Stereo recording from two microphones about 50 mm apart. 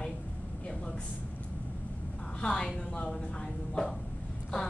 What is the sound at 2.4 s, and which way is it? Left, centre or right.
Speech, centre.